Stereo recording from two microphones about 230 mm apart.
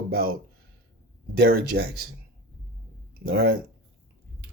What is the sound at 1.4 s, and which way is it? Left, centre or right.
Speech, right.